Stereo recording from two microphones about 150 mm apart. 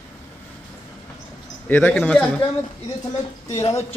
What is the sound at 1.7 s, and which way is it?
Speech, 10° left (ahead or behind).